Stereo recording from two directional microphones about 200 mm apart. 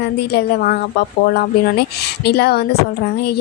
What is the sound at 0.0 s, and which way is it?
Speech, 55° left (ahead or behind).